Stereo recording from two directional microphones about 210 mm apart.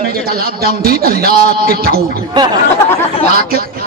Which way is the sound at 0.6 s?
45° right (ahead or behind).